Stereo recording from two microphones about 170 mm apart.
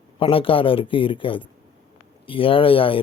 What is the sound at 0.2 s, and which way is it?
Speech, 30° left (ahead or behind).